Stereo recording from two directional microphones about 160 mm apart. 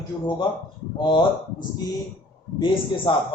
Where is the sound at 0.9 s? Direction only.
30° left (ahead or behind).